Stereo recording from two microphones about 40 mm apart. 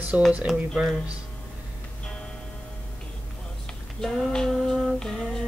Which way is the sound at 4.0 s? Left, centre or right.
Centre.